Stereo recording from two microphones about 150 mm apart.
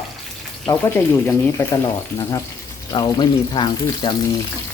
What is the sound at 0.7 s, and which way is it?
Speech, 15° left (ahead or behind).